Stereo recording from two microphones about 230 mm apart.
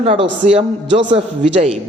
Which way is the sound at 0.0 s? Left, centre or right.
Right.